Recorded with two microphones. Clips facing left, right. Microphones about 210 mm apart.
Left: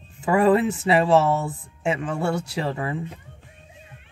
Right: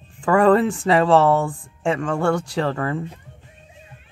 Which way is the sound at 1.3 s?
90° right.